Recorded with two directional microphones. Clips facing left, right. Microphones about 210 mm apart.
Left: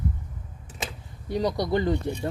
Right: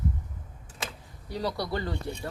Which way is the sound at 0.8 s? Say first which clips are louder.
Left 3 dB; 20° left (ahead or behind).